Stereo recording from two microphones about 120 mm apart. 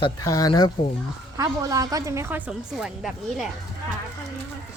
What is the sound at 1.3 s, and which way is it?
A woman's voice, 30° right (ahead or behind).